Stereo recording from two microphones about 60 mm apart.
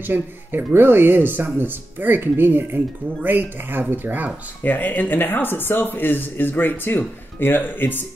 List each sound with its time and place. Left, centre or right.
0.0 s speech: right
4.6 s speech: left